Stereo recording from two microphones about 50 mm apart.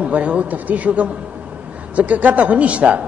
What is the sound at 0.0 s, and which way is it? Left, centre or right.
A man's voice, right.